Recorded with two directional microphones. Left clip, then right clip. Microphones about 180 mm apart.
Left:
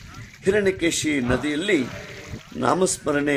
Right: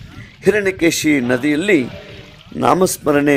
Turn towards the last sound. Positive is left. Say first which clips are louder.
# right 7 dB
turn(degrees=-40)  # may be behind; listen again after turning